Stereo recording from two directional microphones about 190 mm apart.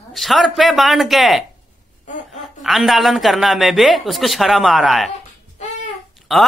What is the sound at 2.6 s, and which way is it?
Speech, centre (ahead or behind).